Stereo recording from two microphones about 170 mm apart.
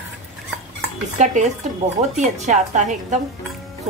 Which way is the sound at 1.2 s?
45° right (ahead or behind).